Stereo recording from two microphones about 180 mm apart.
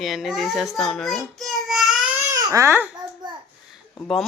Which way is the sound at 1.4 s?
Centre (ahead or behind).